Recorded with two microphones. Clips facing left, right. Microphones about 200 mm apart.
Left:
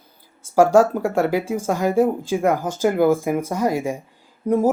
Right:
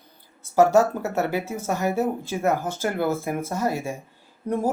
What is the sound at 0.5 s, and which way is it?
Speech, 10° left (ahead or behind).